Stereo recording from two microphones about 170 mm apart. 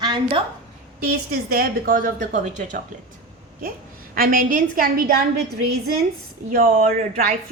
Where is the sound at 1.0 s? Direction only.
65° right (ahead or behind); by 2.8 s 45° right (ahead or behind).